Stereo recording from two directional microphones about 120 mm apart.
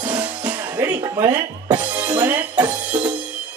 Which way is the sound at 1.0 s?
30° right (ahead or behind).